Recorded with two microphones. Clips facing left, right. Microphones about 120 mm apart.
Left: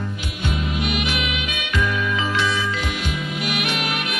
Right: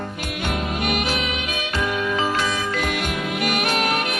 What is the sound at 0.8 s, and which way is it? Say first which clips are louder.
Music: right 3 dB; 45° right (ahead or behind).